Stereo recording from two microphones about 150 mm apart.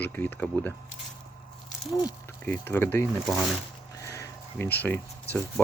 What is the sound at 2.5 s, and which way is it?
Speech, 15° left (ahead or behind).